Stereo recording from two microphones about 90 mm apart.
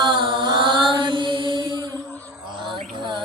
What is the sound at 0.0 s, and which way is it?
Mantra, 60° right (ahead or behind).